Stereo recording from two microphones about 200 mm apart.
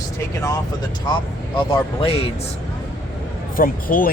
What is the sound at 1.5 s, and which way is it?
Speech, 25° left (ahead or behind).